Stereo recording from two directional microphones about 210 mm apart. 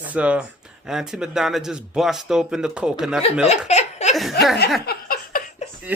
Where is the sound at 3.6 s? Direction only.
30° left (ahead or behind).